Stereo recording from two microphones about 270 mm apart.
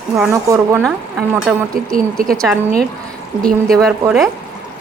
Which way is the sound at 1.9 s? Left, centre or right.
Right.